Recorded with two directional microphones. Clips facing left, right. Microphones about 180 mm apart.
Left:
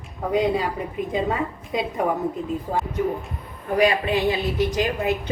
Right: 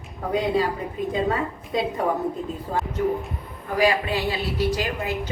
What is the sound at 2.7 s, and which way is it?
Speech, centre (ahead or behind).